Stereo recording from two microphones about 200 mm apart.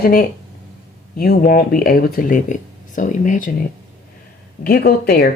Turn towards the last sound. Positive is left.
turn(degrees=50)  # may be behind; listen again after turning